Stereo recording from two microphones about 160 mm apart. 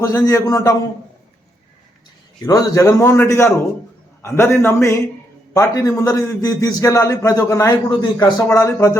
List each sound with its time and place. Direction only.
0.0 s a man's voice: 20° left (ahead or behind)
2.5 s a man's voice: 20° left (ahead or behind)